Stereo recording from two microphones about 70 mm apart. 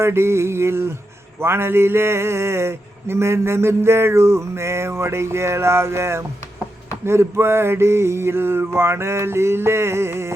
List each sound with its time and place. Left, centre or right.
0.0 s speech: right